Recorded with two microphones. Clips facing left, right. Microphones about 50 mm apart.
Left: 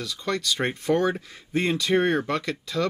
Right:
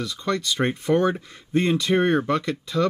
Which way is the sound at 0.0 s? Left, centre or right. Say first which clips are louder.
Right 3 dB; right.